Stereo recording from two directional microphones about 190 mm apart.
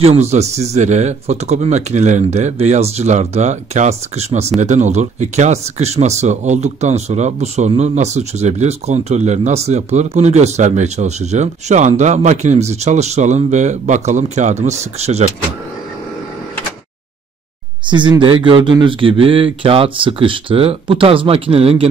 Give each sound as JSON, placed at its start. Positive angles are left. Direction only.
{"t": 0.0, "sound": "speech", "side_deg": -35}
{"t": 17.8, "sound": "speech", "side_deg": -25}